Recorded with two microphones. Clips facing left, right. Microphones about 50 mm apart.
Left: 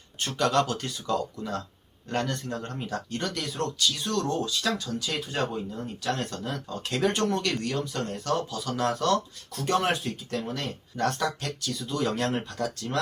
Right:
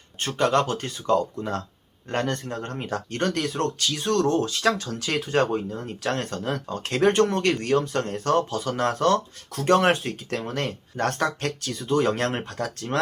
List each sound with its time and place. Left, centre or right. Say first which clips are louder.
0.2 s speech: right 3 dB; right